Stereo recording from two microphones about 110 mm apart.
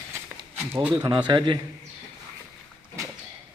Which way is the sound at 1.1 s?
45° right (ahead or behind).